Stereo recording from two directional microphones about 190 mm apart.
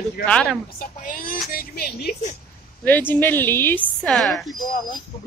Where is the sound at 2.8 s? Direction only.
10° left (ahead or behind).